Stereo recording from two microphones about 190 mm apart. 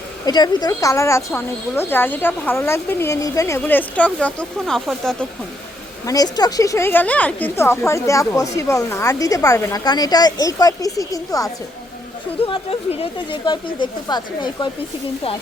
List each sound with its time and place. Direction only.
0.3 s speech: 20° left (ahead or behind); by 5.1 s centre (ahead or behind)
6.1 s speech: 20° left (ahead or behind)
12.4 s speech: 30° left (ahead or behind)